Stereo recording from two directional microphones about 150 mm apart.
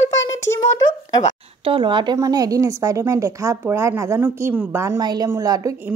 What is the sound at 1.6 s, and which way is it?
A woman's voice, 35° right (ahead or behind).